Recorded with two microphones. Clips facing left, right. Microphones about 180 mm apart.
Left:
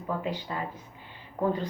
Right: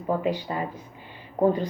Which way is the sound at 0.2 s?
15° right (ahead or behind).